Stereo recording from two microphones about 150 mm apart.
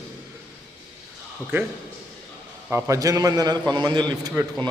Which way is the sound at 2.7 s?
20° right (ahead or behind).